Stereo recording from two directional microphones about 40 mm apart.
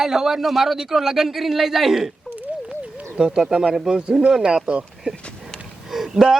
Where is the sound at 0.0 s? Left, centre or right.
Centre.